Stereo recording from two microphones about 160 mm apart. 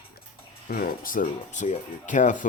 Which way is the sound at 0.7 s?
65° left (ahead or behind).